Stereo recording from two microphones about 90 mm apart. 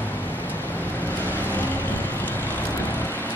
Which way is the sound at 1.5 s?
20° left (ahead or behind).